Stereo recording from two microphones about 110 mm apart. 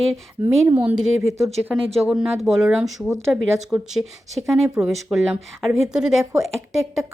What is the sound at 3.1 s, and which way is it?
Speech, 25° right (ahead or behind).